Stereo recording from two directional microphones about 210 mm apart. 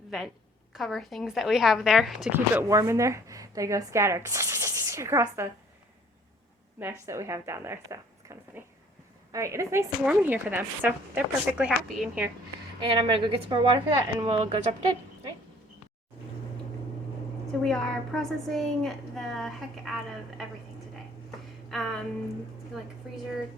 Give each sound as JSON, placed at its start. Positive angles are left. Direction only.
{"t": 0.1, "sound": "a woman's voice", "side_deg": 0}
{"t": 7.0, "sound": "a woman's voice", "side_deg": -15}
{"t": 12.8, "sound": "a woman's voice", "side_deg": -25}
{"t": 17.6, "sound": "a woman's voice", "side_deg": 5}
{"t": 21.7, "sound": "a woman's voice", "side_deg": 0}